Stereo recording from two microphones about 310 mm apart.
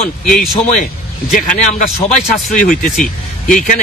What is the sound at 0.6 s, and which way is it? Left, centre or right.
A man's voice, left.